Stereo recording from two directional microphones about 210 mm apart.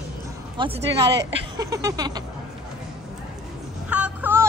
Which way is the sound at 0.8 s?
55° right (ahead or behind).